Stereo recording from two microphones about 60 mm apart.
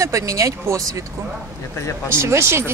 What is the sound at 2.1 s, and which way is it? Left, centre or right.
Speech, right.